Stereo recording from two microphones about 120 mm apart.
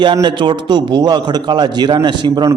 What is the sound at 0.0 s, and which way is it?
A man's voice, 40° right (ahead or behind).